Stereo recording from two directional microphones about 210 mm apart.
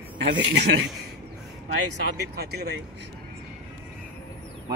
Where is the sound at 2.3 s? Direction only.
50° right (ahead or behind).